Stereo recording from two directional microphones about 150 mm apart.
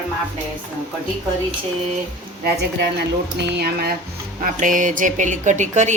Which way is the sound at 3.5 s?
90° right.